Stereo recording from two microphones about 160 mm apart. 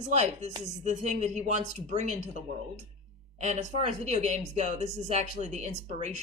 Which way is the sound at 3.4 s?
45° right (ahead or behind).